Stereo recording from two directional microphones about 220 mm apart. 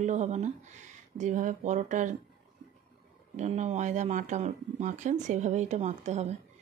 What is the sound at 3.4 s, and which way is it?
Speech, 30° right (ahead or behind).